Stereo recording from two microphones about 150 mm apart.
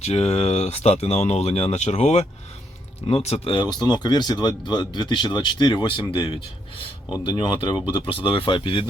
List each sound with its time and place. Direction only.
0.0 s speech: 45° left (ahead or behind)